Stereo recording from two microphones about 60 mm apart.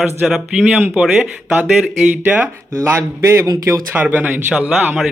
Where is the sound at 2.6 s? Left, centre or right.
Right.